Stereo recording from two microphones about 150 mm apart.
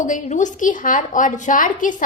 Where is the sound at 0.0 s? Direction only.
55° left (ahead or behind).